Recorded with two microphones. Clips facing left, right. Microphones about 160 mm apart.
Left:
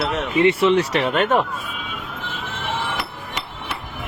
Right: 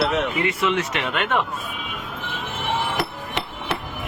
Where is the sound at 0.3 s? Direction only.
30° left (ahead or behind).